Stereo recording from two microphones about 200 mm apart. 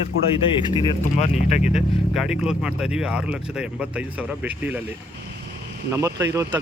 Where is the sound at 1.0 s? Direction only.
35° left (ahead or behind).